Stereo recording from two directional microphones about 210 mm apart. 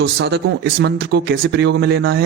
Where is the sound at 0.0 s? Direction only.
55° right (ahead or behind).